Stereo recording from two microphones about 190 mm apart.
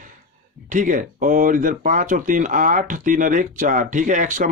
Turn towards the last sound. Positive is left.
turn(degrees=-40)  # may be behind; listen again after turning